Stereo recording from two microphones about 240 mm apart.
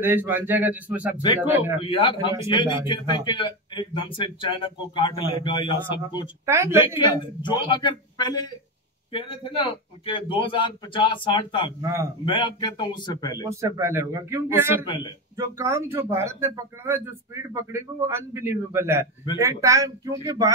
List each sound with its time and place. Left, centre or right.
0.0 s a man's voice: centre
1.8 s speech: left
6.4 s a man's voice: centre
7.4 s speech: centre
11.8 s a man's voice: centre
12.3 s speech: centre
13.4 s a man's voice: centre